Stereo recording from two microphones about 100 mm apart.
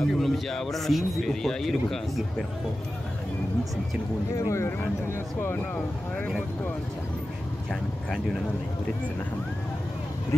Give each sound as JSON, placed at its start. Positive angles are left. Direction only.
{"t": 0.0, "sound": "a man's voice", "side_deg": 0}
{"t": 4.5, "sound": "speech", "side_deg": 25}